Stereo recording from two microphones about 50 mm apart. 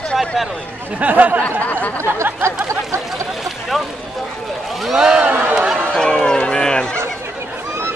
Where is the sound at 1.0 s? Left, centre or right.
Right.